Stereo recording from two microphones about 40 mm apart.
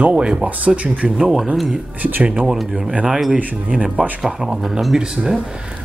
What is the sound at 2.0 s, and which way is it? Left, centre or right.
Speech, right.